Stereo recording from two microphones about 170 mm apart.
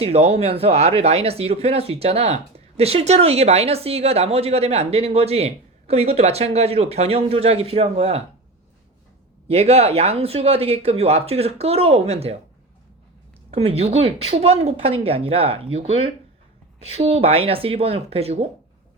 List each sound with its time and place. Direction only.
0.0 s speech: 35° right (ahead or behind)
9.5 s speech: 35° right (ahead or behind)
13.5 s speech: 35° right (ahead or behind)